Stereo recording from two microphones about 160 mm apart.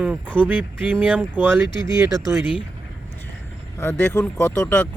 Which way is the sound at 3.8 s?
15° left (ahead or behind).